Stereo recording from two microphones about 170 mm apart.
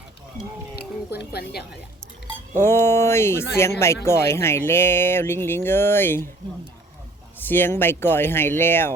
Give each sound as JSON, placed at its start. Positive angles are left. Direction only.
{"t": 1.1, "sound": "a woman's voice", "side_deg": 70}
{"t": 2.6, "sound": "speech", "side_deg": 15}
{"t": 7.3, "sound": "speech", "side_deg": 10}